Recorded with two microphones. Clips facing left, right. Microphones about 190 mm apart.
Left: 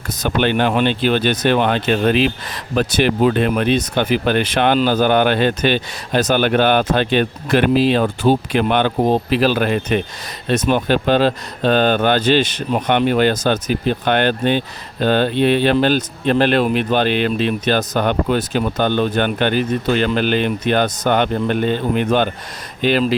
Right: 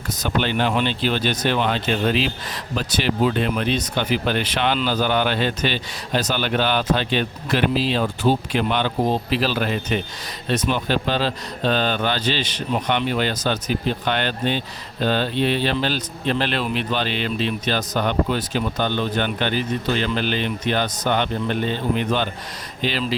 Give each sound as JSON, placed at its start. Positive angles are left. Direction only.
{"t": 0.2, "sound": "speech", "side_deg": 60}